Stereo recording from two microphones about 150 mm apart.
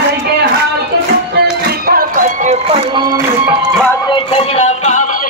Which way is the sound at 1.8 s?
75° right (ahead or behind).